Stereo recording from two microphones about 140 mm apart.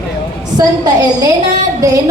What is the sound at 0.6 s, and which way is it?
Speech, 25° right (ahead or behind).